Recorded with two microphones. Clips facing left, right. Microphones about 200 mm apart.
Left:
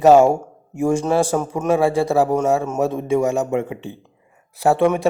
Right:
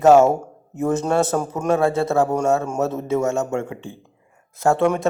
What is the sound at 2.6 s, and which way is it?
A man's voice, 5° left (ahead or behind).